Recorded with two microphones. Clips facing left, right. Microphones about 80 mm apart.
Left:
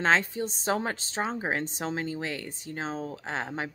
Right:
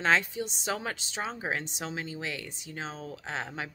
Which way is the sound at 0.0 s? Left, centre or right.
Left.